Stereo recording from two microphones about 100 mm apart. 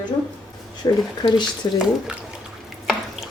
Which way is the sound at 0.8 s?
45° left (ahead or behind).